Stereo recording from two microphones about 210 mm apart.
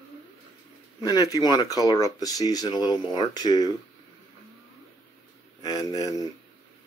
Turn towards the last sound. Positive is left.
turn(degrees=15)  # may be behind; listen again after turning